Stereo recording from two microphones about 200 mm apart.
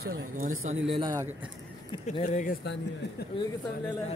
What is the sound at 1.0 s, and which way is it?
Speech, 20° right (ahead or behind).